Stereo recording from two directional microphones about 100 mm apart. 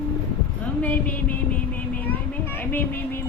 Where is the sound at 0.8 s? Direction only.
15° left (ahead or behind).